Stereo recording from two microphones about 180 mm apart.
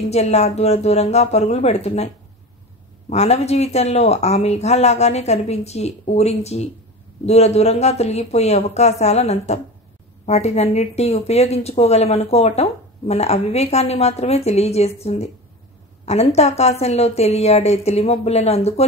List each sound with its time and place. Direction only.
0.1 s a woman's voice: 35° left (ahead or behind)
3.1 s a woman's voice: 35° left (ahead or behind)